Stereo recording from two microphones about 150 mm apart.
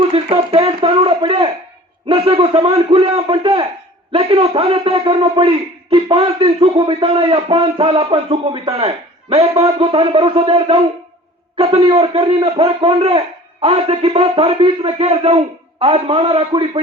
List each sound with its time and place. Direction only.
0.0 s a man's voice: 40° right (ahead or behind)